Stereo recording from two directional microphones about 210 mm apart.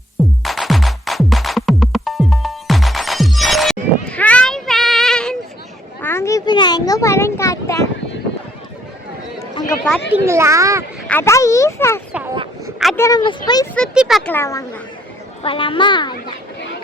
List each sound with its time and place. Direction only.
0.4 s music: centre (ahead or behind)
6.0 s a sound: 10° left (ahead or behind)
9.8 s a sound: 5° left (ahead or behind)
10.2 s speech: 15° right (ahead or behind)
11.1 s speech: 10° left (ahead or behind)
13.7 s speech: centre (ahead or behind)
15.4 s speech: 25° left (ahead or behind)